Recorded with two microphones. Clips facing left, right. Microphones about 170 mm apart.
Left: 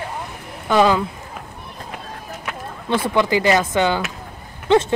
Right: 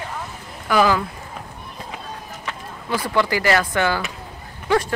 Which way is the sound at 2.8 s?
25° left (ahead or behind).